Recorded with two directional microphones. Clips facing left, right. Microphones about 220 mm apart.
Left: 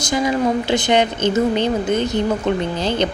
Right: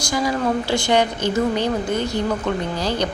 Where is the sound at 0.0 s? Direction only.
20° left (ahead or behind).